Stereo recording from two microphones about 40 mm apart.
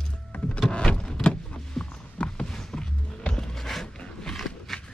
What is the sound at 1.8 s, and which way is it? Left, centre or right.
Walk, left.